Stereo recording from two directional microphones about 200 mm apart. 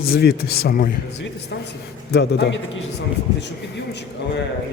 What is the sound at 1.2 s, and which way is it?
A man's voice, 55° left (ahead or behind).